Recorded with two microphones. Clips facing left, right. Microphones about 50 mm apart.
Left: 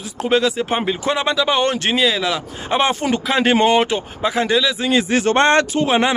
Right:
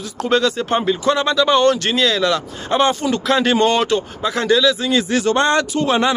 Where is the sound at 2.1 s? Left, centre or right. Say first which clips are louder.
Right 2 dB; centre; by 5.8 s left.